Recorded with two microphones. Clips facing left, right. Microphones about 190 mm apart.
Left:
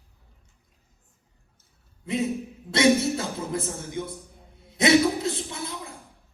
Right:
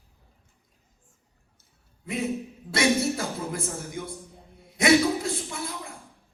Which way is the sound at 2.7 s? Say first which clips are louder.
Left 3 dB; 25° left (ahead or behind).